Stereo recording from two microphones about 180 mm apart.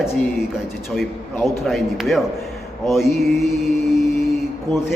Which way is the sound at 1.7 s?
Centre (ahead or behind).